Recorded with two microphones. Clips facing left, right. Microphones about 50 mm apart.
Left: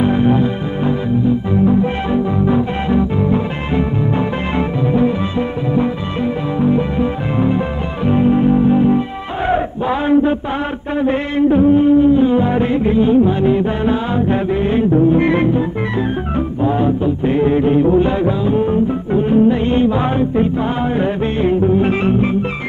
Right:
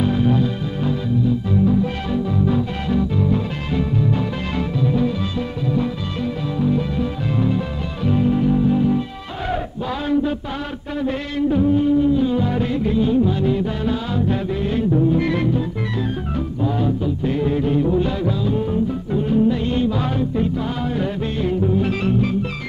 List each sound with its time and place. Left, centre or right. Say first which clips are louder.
0.0 s music: left 5 dB; left
6.6 s music: left 5 dB; left
11.0 s music: left 7 dB; left
16.6 s music: left 6 dB; left